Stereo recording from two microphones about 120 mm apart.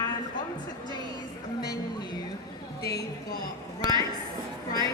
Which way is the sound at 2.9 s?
30° left (ahead or behind).